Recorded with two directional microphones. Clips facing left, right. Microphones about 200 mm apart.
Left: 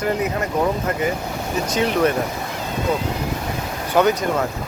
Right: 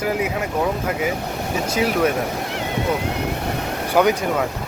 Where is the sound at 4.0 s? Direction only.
10° right (ahead or behind).